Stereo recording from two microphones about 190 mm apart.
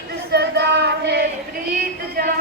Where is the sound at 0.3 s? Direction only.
60° right (ahead or behind).